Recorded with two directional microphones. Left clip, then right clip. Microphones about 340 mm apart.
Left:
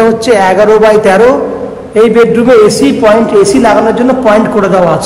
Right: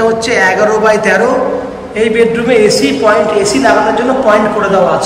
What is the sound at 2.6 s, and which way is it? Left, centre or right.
A man's voice, centre.